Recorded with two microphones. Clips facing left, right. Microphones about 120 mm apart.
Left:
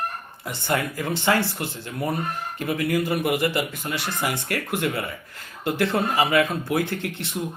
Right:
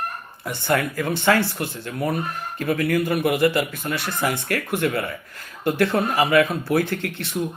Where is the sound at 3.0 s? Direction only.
25° left (ahead or behind).